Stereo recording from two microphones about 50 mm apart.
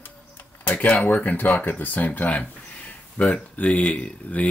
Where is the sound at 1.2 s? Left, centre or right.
Left.